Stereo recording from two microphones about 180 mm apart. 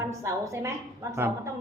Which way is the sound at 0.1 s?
15° right (ahead or behind).